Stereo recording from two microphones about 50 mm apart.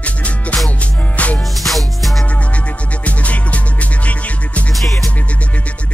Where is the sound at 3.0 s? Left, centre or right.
Left.